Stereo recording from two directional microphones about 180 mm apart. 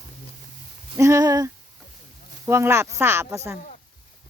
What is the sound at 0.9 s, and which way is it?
Speech, 15° right (ahead or behind).